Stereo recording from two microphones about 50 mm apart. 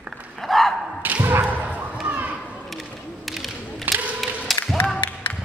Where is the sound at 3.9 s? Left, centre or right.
Right.